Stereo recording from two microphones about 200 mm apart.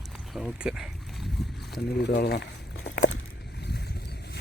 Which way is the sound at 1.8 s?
55° left (ahead or behind).